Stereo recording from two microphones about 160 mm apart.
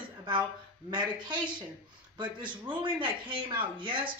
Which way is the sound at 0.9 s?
30° right (ahead or behind).